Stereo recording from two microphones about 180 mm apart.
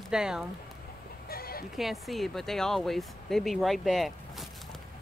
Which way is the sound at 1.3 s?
55° left (ahead or behind).